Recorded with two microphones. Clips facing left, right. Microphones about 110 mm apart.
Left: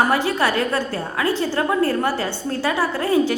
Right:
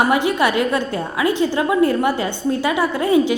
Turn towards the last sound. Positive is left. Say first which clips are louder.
# right 3 dB
turn(degrees=-20)  # may be behind; listen again after turning